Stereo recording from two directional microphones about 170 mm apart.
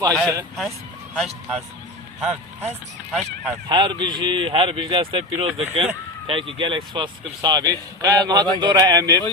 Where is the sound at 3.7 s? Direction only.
25° right (ahead or behind).